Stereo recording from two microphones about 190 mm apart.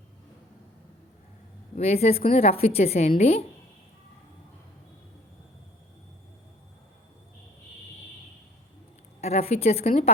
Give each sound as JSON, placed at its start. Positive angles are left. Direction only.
{"t": 1.7, "sound": "a woman's voice", "side_deg": 35}
{"t": 9.2, "sound": "a woman's voice", "side_deg": 35}